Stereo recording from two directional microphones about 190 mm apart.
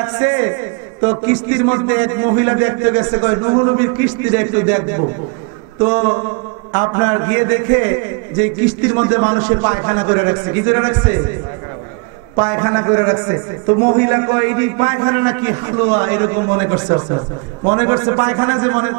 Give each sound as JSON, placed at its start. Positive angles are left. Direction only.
{"t": 0.0, "sound": "a man's voice", "side_deg": -20}
{"t": 5.8, "sound": "a man's voice", "side_deg": -30}
{"t": 12.4, "sound": "a man's voice", "side_deg": -20}